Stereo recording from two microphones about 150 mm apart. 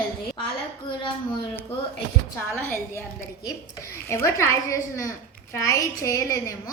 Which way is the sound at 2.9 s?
20° left (ahead or behind).